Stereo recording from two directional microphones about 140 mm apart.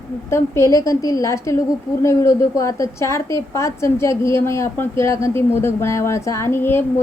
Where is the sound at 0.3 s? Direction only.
20° left (ahead or behind).